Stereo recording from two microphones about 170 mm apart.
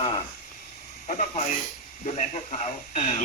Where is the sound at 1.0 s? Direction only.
45° left (ahead or behind).